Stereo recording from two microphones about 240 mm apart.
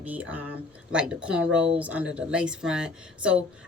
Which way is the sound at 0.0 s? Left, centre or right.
Centre.